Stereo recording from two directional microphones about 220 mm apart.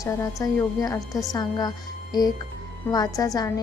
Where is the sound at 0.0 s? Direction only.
15° left (ahead or behind).